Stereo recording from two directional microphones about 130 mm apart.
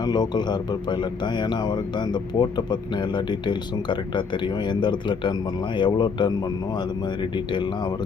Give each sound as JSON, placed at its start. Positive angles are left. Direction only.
{"t": 0.0, "sound": "a man's voice", "side_deg": 30}